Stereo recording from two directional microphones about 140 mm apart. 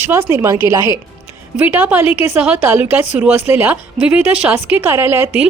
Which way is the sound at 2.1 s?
45° left (ahead or behind).